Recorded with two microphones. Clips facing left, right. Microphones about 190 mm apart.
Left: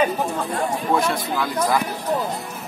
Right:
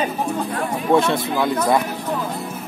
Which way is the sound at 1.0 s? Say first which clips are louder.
Right 3 dB; 25° right (ahead or behind).